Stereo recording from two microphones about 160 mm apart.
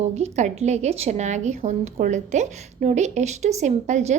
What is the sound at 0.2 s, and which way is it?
A woman's voice, 45° right (ahead or behind).